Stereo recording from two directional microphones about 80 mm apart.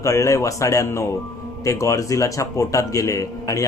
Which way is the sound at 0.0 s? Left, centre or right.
Left.